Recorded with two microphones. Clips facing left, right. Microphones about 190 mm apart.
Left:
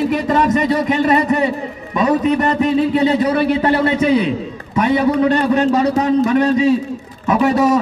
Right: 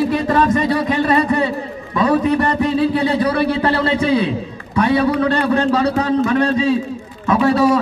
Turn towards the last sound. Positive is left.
turn(degrees=20)  # may be behind; listen again after turning